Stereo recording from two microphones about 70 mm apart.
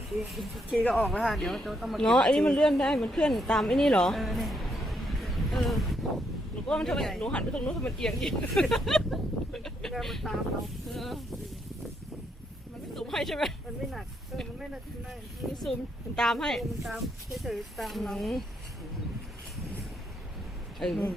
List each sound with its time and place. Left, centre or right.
0.3 s speech: centre
2.0 s a woman's voice: centre
7.3 s speech: centre
13.0 s speech: centre
15.4 s speech: right
16.1 s speech: centre
20.7 s speech: centre